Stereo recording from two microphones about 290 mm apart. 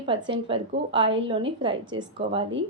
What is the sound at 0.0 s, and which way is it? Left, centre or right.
A woman's voice, centre.